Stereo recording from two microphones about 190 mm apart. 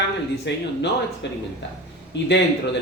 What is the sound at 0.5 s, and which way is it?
Speech, 70° left (ahead or behind).